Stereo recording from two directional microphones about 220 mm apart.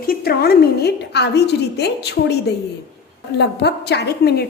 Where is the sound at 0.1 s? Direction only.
45° left (ahead or behind).